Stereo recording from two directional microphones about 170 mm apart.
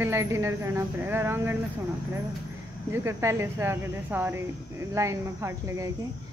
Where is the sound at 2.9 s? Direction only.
15° right (ahead or behind).